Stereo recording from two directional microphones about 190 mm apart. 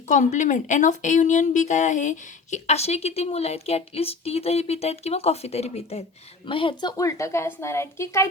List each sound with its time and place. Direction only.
0.1 s a woman's voice: 40° left (ahead or behind); by 8.3 s 15° left (ahead or behind)